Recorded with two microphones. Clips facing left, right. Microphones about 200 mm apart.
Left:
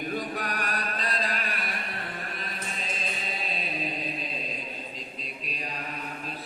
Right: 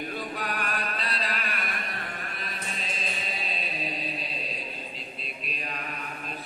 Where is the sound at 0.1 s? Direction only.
45° left (ahead or behind).